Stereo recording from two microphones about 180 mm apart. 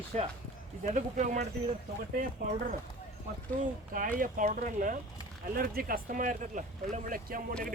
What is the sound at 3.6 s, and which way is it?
Speech, 50° right (ahead or behind).